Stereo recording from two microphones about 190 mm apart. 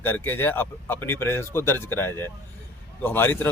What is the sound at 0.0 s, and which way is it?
Speech, 10° left (ahead or behind).